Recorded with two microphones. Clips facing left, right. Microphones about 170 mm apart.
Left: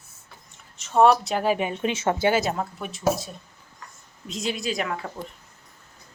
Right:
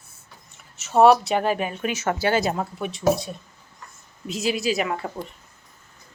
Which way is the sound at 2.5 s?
5° right (ahead or behind).